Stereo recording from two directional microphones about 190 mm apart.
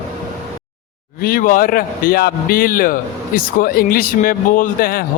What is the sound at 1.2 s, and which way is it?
A man's voice, 50° left (ahead or behind).